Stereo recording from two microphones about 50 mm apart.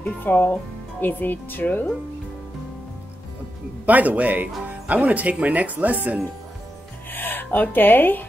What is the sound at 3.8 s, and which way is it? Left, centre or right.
Speech, right.